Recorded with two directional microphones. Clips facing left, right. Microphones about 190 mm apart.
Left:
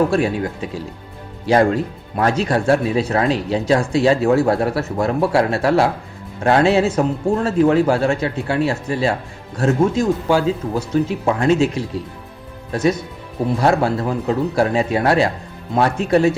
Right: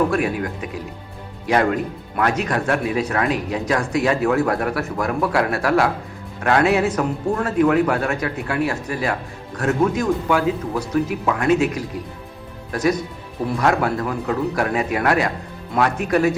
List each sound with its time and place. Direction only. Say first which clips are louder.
0.1 s speech: left 3 dB; 30° left (ahead or behind)